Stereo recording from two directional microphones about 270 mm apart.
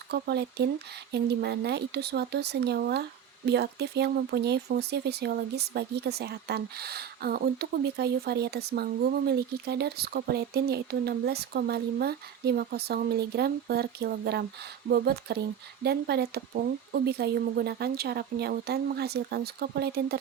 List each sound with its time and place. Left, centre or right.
0.1 s speech: right